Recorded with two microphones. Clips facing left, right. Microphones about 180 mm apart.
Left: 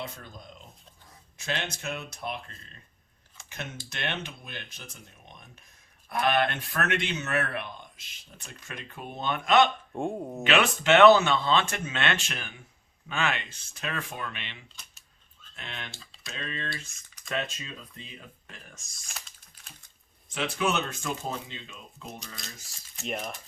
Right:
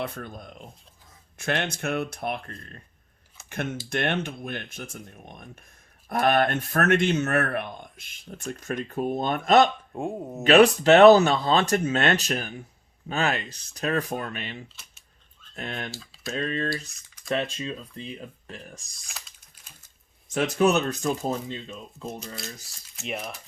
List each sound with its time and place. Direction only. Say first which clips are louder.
0.0 s speech: right 7 dB; 60° right (ahead or behind)
3.8 s speech: right 8 dB; 50° right (ahead or behind)
9.9 s speech: even; centre (ahead or behind)
10.4 s speech: right 9 dB; 40° right (ahead or behind)
15.9 s speech: right 9 dB; centre (ahead or behind)
16.3 s speech: right 9 dB; 40° right (ahead or behind)
20.2 s speech: right 7 dB; 45° right (ahead or behind)
23.0 s speech: right 1 dB; centre (ahead or behind)